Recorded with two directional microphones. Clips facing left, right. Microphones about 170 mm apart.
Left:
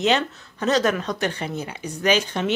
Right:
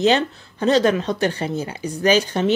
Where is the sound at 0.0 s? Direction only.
30° right (ahead or behind).